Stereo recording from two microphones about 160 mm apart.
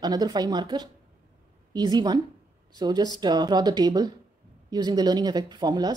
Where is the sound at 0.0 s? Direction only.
25° right (ahead or behind).